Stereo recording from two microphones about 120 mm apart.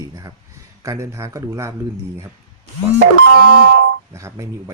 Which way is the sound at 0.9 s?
25° right (ahead or behind).